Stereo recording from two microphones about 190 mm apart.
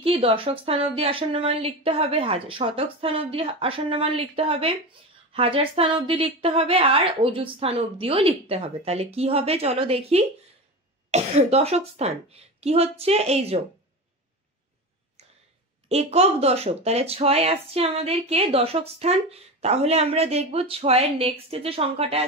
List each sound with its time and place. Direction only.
0.0 s a woman's voice: 30° right (ahead or behind)
15.9 s speech: 35° right (ahead or behind)